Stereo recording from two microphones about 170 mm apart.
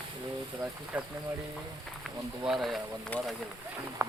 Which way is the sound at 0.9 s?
10° right (ahead or behind).